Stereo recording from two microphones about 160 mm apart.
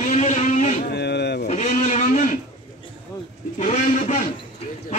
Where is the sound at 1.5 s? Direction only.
50° left (ahead or behind).